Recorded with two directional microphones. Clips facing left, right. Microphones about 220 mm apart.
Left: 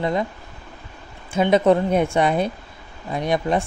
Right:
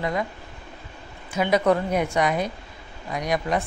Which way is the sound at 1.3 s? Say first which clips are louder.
Left 4 dB; 25° left (ahead or behind).